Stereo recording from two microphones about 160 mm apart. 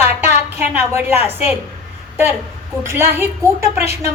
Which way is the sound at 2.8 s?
15° right (ahead or behind).